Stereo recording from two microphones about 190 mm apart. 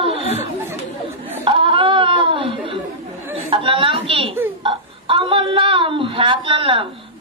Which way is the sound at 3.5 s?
25° right (ahead or behind).